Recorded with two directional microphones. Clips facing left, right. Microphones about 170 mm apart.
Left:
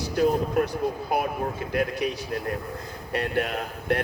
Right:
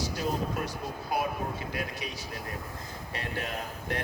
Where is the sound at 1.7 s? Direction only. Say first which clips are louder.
Left 10 dB; 60° left (ahead or behind).